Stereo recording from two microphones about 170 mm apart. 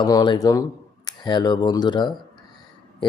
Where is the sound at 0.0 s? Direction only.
25° left (ahead or behind).